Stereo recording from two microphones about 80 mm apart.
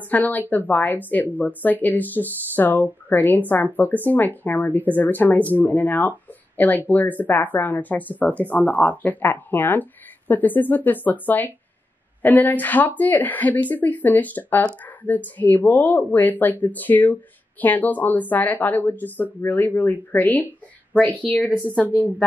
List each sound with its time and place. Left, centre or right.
0.1 s speech: left
21.5 s a woman's voice: right
21.7 s speech: left